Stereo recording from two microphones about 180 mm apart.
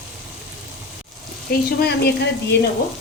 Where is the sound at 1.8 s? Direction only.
70° left (ahead or behind).